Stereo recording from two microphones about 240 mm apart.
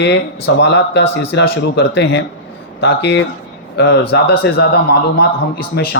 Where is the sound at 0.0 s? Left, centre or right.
Left.